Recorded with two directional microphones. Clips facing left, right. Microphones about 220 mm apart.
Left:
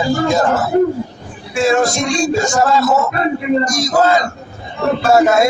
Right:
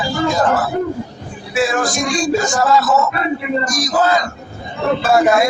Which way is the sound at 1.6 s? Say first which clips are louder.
Left 5 dB; 25° left (ahead or behind).